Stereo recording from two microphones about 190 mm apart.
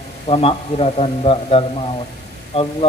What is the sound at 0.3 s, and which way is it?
Speech, 30° left (ahead or behind).